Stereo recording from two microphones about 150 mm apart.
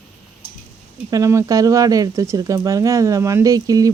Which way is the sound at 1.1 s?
20° right (ahead or behind).